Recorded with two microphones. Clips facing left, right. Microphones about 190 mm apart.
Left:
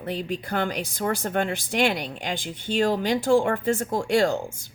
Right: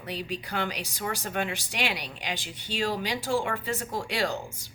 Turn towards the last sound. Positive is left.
turn(degrees=50)  # may be behind; listen again after turning